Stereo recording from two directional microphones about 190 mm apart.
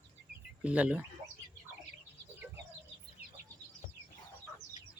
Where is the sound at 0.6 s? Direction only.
5° right (ahead or behind).